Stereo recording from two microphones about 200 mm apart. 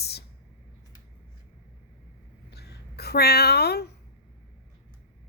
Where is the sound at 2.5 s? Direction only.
55° left (ahead or behind).